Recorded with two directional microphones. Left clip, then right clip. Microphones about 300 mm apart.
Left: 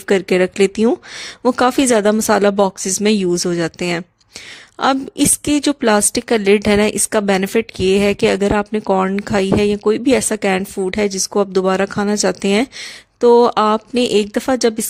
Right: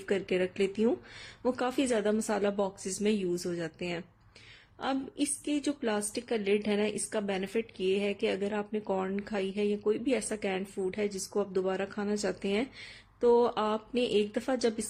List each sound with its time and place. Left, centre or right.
0.1 s a woman's voice: left